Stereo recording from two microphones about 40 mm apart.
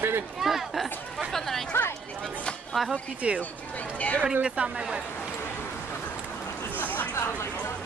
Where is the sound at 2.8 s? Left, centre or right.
Centre.